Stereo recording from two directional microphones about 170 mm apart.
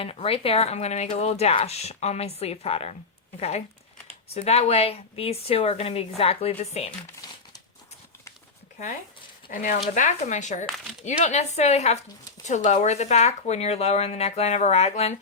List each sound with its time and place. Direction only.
0.0 s speech: 35° left (ahead or behind)
4.4 s speech: 35° left (ahead or behind)
7.2 s crumpling: 20° left (ahead or behind)
9.5 s speech: 50° left (ahead or behind)